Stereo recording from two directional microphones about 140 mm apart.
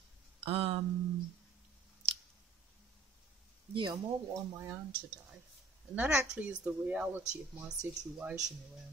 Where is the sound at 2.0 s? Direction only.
50° right (ahead or behind).